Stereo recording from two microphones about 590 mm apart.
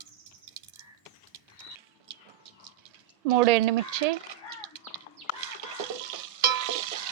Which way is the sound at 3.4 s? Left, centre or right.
Right.